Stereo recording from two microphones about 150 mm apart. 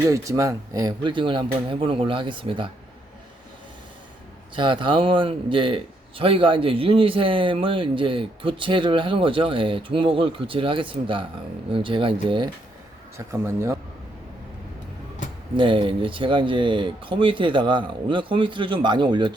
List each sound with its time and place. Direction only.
0.0 s a man's voice: 20° right (ahead or behind)
4.5 s a man's voice: 35° right (ahead or behind)
13.1 s speech: 20° right (ahead or behind)
15.5 s a man's voice: 35° right (ahead or behind)